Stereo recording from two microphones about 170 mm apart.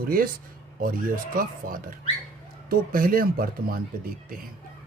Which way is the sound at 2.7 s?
60° right (ahead or behind).